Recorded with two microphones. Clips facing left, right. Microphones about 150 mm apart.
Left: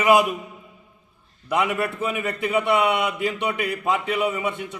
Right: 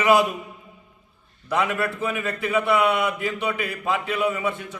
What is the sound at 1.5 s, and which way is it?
A man's voice, 20° left (ahead or behind).